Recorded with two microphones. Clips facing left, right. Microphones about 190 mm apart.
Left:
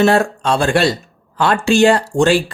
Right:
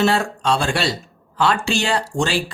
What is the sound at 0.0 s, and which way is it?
Speech, 50° left (ahead or behind).